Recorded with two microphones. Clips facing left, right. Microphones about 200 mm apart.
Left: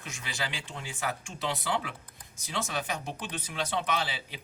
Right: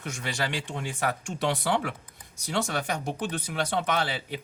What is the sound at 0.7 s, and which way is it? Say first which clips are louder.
Speech: right 5 dB; 60° right (ahead or behind).